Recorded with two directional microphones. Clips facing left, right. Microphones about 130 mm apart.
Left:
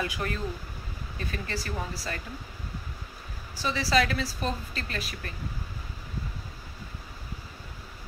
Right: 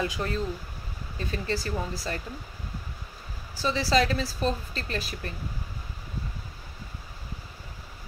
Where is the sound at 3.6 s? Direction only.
30° right (ahead or behind).